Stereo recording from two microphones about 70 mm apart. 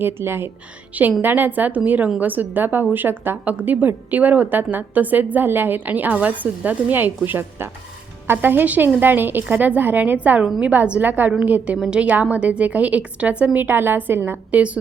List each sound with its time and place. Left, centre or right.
0.0 s a woman's voice: right
14.5 s a woman's voice: centre